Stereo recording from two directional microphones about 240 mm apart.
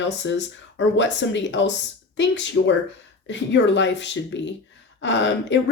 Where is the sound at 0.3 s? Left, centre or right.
Left.